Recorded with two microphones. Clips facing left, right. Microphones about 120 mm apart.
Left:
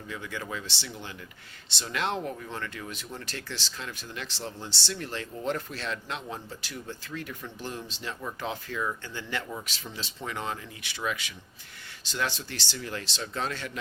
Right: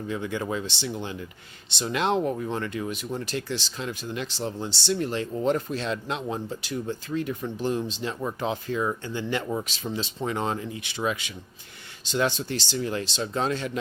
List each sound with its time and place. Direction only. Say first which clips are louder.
0.1 s speech: right 7 dB; 25° right (ahead or behind)